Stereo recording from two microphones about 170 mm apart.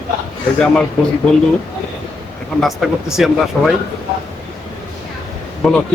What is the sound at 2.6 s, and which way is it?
Speech, centre (ahead or behind).